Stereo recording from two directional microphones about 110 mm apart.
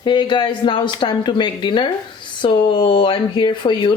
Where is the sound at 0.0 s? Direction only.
45° left (ahead or behind).